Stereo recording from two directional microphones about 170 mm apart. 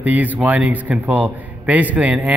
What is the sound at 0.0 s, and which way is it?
A man's voice, 10° right (ahead or behind).